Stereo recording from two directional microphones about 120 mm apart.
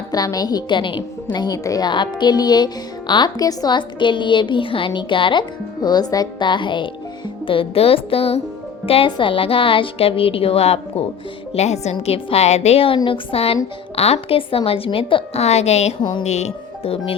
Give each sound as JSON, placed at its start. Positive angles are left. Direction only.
{"t": 0.1, "sound": "a woman's voice", "side_deg": 30}